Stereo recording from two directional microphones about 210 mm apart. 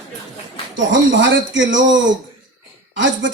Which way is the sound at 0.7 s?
60° right (ahead or behind).